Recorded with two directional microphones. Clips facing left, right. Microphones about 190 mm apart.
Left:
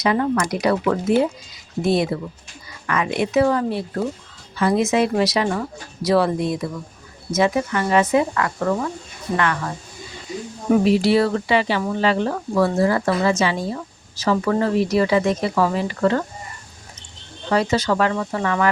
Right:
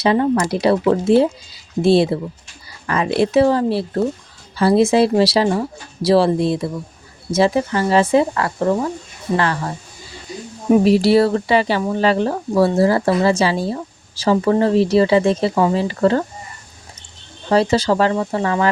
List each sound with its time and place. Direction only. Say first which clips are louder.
0.0 s speech: right 4 dB; 30° right (ahead or behind)
10.8 s speech: right 3 dB; 35° right (ahead or behind)
17.5 s speech: right 4 dB; 30° right (ahead or behind)